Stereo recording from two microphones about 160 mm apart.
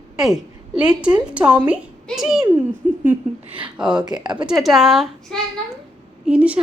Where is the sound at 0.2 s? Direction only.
Centre (ahead or behind).